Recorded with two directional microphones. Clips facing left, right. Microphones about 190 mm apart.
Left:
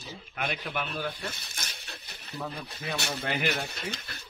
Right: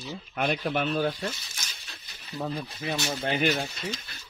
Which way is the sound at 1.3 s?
55° left (ahead or behind).